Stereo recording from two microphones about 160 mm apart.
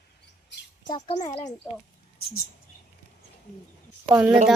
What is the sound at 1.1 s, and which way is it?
Speech, 90° left.